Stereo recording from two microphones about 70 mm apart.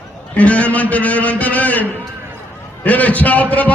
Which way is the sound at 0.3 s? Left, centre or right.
Centre.